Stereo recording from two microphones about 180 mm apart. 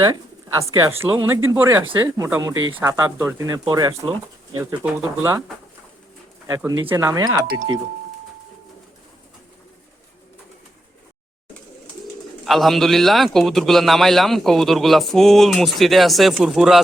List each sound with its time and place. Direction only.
0.0 s speech: 15° right (ahead or behind)
6.8 s speech: 15° right (ahead or behind)
12.5 s a man's voice: centre (ahead or behind)